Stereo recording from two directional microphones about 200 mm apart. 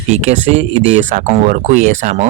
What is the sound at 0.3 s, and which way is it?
Speech, 35° right (ahead or behind).